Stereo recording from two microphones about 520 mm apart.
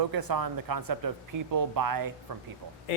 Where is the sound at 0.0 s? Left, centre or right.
Right.